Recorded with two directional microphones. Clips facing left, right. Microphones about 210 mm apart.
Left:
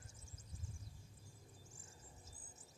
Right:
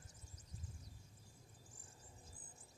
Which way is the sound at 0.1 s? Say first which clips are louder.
Even; 25° left (ahead or behind).